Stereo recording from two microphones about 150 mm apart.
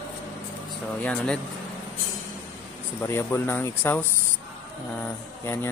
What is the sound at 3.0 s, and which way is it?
Speech, 15° left (ahead or behind).